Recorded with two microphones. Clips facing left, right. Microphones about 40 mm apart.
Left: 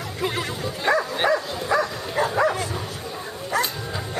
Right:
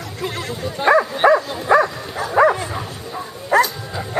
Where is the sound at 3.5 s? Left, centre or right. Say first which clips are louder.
Right 9 dB; right.